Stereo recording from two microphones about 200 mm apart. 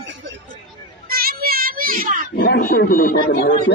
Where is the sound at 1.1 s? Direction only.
50° right (ahead or behind).